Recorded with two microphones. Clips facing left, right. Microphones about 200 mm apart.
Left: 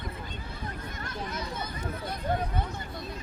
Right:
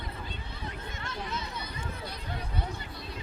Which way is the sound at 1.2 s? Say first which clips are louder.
Left 4 dB; 50° left (ahead or behind).